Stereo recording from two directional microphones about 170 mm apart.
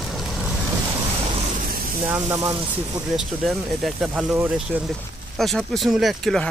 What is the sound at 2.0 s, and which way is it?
Speech, 15° right (ahead or behind).